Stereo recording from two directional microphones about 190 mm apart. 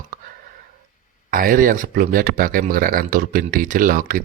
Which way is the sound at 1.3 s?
45° right (ahead or behind).